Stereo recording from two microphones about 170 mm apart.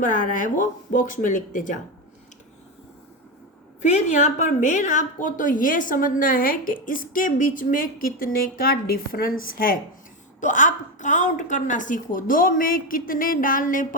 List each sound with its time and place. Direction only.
0.0 s a woman's voice: 55° left (ahead or behind)
3.8 s a woman's voice: 45° left (ahead or behind)